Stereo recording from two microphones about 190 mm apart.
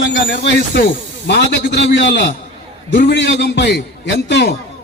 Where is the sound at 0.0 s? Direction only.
70° left (ahead or behind).